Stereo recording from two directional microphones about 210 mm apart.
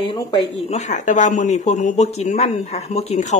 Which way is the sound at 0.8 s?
35° left (ahead or behind).